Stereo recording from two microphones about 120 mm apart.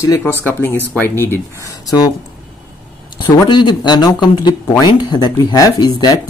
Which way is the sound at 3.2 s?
40° left (ahead or behind).